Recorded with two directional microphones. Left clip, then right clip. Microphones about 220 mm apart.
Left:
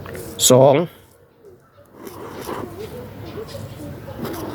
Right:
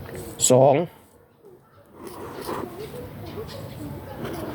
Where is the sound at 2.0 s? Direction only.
Centre (ahead or behind).